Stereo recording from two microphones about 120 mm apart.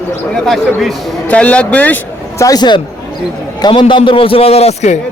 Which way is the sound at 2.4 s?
35° left (ahead or behind).